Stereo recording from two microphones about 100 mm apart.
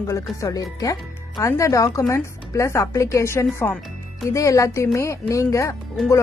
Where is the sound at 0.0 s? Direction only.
35° left (ahead or behind).